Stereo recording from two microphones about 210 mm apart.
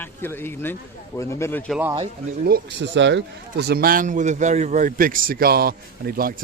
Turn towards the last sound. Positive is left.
turn(degrees=-45)  # may be behind; listen again after turning